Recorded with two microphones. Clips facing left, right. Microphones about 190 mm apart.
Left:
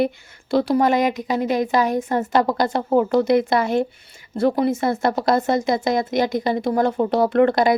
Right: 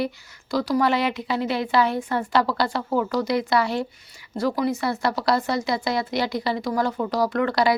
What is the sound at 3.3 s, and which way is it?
Speech, 50° left (ahead or behind).